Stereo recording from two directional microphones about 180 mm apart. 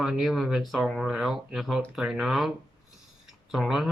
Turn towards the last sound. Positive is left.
turn(degrees=0)  # may be behind; listen again after turning